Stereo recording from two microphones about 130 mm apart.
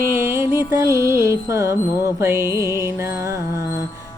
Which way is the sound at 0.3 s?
20° right (ahead or behind).